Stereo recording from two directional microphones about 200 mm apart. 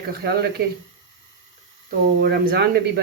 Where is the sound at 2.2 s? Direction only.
50° right (ahead or behind).